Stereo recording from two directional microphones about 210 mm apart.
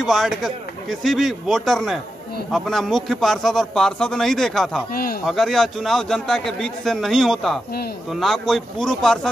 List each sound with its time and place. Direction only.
0.0 s a man's voice: centre (ahead or behind)
4.9 s speech: 45° left (ahead or behind)
5.2 s a man's voice: centre (ahead or behind)